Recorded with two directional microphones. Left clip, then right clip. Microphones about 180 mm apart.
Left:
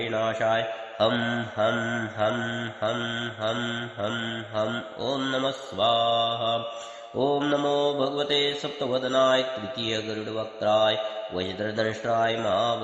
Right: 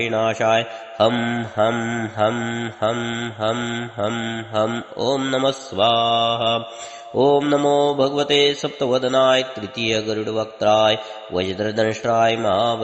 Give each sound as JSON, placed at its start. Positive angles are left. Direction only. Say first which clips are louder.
{"t": 0.0, "sound": "mantra", "louder": "right 6 dB", "side_deg": -25}